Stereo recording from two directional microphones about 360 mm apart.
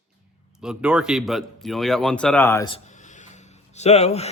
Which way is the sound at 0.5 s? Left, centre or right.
Centre.